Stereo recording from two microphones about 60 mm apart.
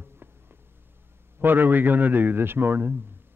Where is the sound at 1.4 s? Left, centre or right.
Right.